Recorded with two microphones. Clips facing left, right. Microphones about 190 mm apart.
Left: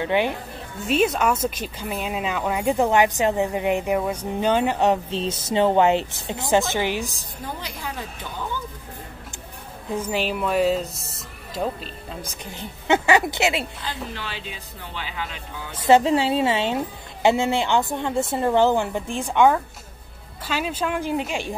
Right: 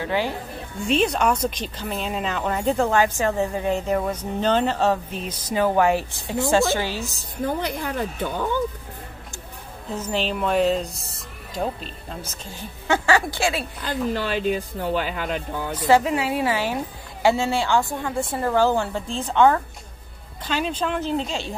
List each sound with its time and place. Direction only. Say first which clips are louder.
0.0 s a woman's voice: left 3 dB; 20° left (ahead or behind)
0.8 s speech: even; 5° left (ahead or behind)
7.4 s speech: right 7 dB; 55° right (ahead or behind)
9.8 s speech: left 1 dB; 10° left (ahead or behind)
12.2 s a woman's voice: left 1 dB; 15° left (ahead or behind)
13.8 s speech: right 8 dB; 45° right (ahead or behind)
15.9 s a woman's voice: left 3 dB; 30° left (ahead or behind)